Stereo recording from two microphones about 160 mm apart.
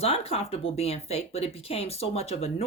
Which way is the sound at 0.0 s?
40° left (ahead or behind).